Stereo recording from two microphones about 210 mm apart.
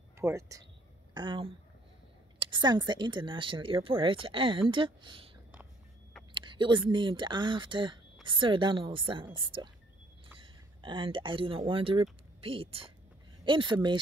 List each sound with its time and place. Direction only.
0.2 s speech: 15° right (ahead or behind)
6.4 s speech: 25° right (ahead or behind)